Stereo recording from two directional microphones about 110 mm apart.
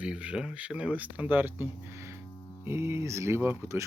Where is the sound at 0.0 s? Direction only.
10° right (ahead or behind).